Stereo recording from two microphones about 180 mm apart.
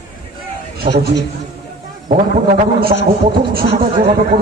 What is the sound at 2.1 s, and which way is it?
A man's voice, 50° right (ahead or behind).